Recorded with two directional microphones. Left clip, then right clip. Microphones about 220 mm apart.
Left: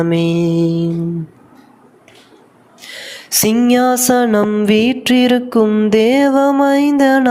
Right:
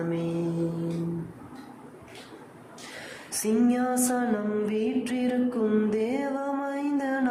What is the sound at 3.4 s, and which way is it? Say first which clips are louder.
Music: left 13 dB; 40° left (ahead or behind).